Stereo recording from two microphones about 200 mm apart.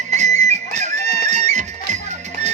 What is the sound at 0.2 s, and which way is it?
Music, 35° right (ahead or behind).